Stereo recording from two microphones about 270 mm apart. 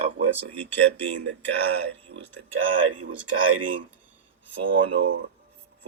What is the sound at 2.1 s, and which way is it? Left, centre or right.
Speech, right.